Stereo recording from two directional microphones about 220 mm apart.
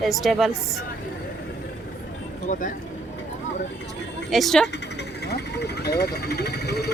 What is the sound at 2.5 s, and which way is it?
Speech, 35° left (ahead or behind).